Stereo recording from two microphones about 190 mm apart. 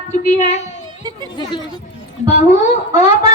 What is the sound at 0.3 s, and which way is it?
Speech, 35° left (ahead or behind).